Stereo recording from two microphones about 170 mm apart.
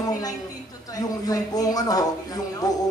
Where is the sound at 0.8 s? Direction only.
20° left (ahead or behind).